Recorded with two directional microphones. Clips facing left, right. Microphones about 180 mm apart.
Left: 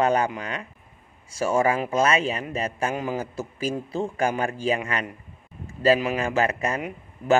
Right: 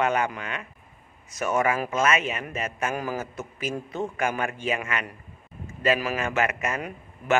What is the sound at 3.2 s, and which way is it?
A man's voice, 30° left (ahead or behind).